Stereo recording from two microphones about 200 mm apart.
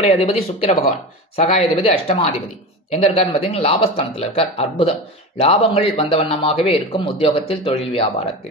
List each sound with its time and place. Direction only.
0.0 s a man's voice: 30° left (ahead or behind)